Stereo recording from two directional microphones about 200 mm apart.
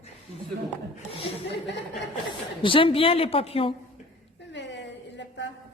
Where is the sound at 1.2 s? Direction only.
30° left (ahead or behind).